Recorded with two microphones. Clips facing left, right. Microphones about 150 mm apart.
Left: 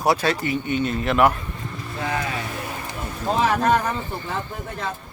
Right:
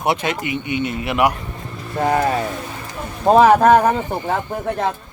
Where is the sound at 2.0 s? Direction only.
50° right (ahead or behind).